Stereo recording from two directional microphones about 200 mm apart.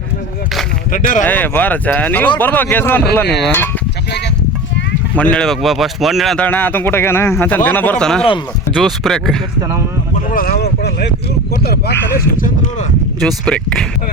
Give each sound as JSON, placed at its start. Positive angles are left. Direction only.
{"t": 0.9, "sound": "speech", "side_deg": 40}
{"t": 1.3, "sound": "speech", "side_deg": 10}
{"t": 5.1, "sound": "speech", "side_deg": 5}
{"t": 10.3, "sound": "speech", "side_deg": 45}
{"t": 13.1, "sound": "speech", "side_deg": 5}